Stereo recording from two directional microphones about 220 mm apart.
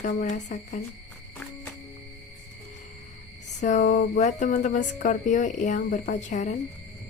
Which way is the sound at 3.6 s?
35° left (ahead or behind).